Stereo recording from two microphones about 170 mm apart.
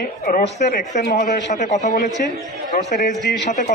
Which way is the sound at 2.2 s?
60° left (ahead or behind).